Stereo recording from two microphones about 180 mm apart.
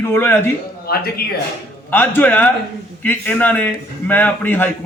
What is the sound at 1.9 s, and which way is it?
A man's voice, 10° left (ahead or behind).